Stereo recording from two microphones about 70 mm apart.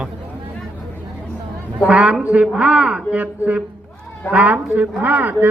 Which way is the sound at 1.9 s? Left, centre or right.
Centre.